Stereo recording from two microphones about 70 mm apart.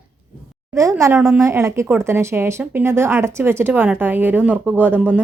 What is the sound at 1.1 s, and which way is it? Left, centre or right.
A woman's voice, right.